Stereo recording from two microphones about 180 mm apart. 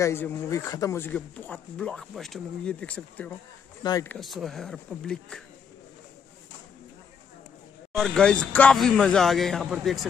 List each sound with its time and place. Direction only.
0.0 s speech: 15° left (ahead or behind)
3.8 s speech: 20° left (ahead or behind)
4.1 s speech: centre (ahead or behind)
7.9 s speech: centre (ahead or behind)